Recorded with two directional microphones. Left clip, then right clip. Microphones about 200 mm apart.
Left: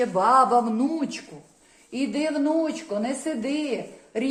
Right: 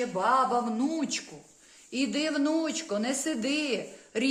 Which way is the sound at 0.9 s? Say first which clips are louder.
Left 2 dB; 15° right (ahead or behind).